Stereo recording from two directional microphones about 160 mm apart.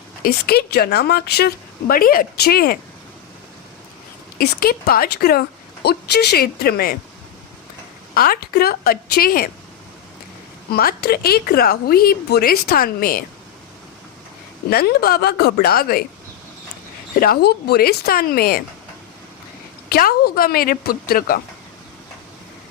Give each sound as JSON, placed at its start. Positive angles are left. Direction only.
{"t": 0.2, "sound": "a woman's voice", "side_deg": 75}
{"t": 4.4, "sound": "speech", "side_deg": 70}
{"t": 8.1, "sound": "speech", "side_deg": 65}
{"t": 10.7, "sound": "speech", "side_deg": 70}
{"t": 14.7, "sound": "speech", "side_deg": 75}
{"t": 17.2, "sound": "speech", "side_deg": 70}
{"t": 19.9, "sound": "a woman's voice", "side_deg": 70}